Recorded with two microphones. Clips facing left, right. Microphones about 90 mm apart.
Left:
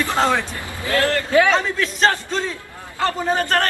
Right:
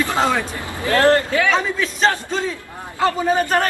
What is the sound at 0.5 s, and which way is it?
Speech, 20° right (ahead or behind).